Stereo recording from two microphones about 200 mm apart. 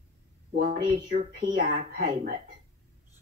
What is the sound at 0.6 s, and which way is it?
Speech, 45° right (ahead or behind).